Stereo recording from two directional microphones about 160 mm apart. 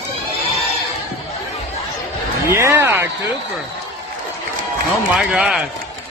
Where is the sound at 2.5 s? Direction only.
15° right (ahead or behind).